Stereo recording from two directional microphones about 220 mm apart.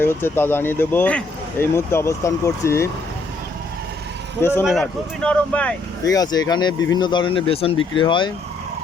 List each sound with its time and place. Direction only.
0.0 s speech: 10° left (ahead or behind)
4.4 s speech: 10° left (ahead or behind)